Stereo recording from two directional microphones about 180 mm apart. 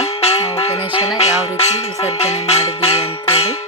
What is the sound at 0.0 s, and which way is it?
Music, 35° left (ahead or behind).